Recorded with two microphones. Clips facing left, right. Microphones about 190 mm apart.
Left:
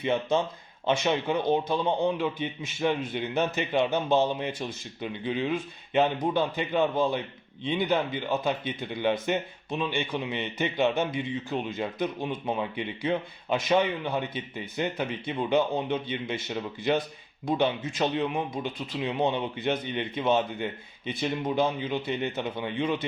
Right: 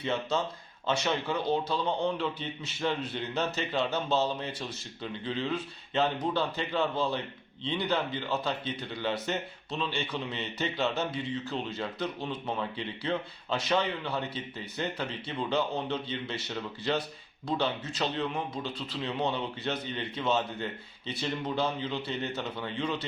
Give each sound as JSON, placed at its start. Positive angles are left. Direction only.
{"t": 0.0, "sound": "speech", "side_deg": 15}